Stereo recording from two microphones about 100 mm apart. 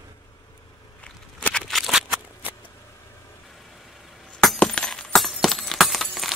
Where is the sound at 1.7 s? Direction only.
Centre (ahead or behind).